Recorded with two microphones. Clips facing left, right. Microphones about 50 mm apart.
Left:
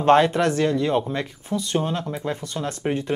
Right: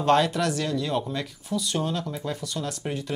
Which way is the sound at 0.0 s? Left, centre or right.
Left.